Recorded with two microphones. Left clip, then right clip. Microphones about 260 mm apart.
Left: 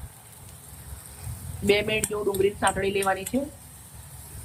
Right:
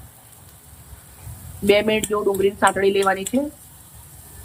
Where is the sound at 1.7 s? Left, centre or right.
Centre.